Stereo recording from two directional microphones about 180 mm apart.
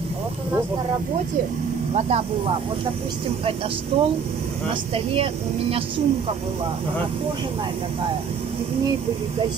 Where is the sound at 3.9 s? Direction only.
30° right (ahead or behind).